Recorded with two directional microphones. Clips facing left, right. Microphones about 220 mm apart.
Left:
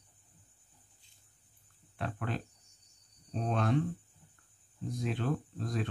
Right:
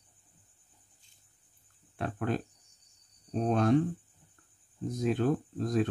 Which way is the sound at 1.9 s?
45° right (ahead or behind).